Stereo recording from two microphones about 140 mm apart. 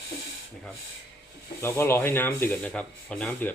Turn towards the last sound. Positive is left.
turn(degrees=10)  # may be behind; listen again after turning